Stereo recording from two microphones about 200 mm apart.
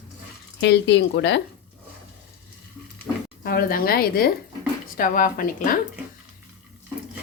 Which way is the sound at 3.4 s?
45° left (ahead or behind).